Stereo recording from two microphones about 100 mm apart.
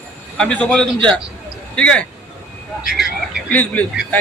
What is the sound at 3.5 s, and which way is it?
Speech, 15° left (ahead or behind).